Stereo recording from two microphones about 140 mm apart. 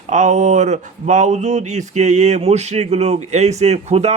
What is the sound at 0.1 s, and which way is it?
Speech, 60° right (ahead or behind).